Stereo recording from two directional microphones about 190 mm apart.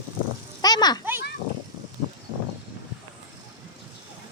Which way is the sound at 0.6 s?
20° left (ahead or behind).